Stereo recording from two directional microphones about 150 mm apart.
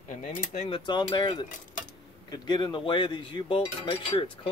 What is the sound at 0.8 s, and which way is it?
Speech, 30° left (ahead or behind).